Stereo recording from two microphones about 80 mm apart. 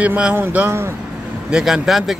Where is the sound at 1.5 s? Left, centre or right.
Centre.